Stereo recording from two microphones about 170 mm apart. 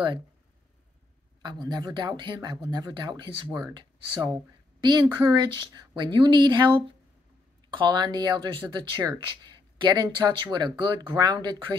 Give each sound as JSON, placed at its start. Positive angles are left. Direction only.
{"t": 1.4, "sound": "speech", "side_deg": -25}